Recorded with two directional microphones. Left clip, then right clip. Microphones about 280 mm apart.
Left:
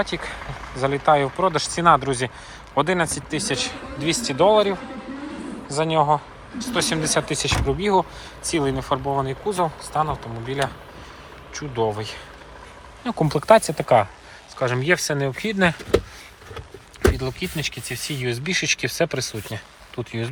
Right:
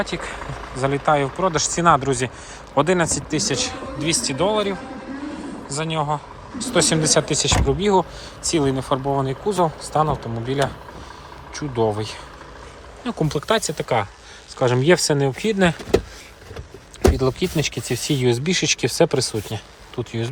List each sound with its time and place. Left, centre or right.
0.0 s speech: centre
0.3 s a sound: right
0.8 s speech: centre
6.6 s speech: centre
14.6 s speech: centre
17.2 s speech: centre